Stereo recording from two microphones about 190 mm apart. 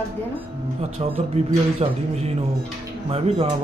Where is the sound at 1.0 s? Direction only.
30° right (ahead or behind).